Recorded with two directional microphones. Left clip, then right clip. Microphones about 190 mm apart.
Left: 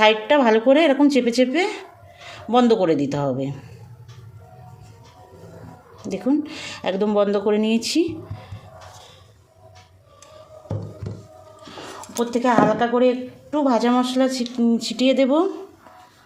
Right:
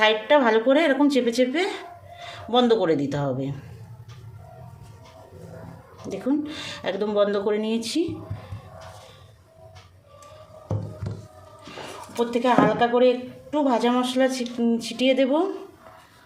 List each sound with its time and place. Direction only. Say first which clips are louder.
0.0 s a woman's voice: left 3 dB; 30° left (ahead or behind)
6.1 s a woman's voice: left 3 dB; 30° left (ahead or behind)
12.1 s a woman's voice: left 2 dB; 25° left (ahead or behind)